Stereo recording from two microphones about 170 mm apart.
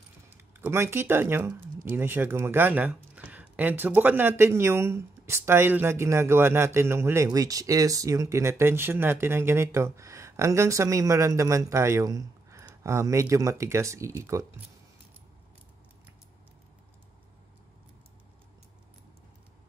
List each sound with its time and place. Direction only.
0.6 s speech: 15° right (ahead or behind)